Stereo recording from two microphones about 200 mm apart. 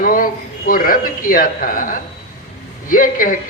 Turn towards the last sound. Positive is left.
turn(degrees=45)  # may be behind; listen again after turning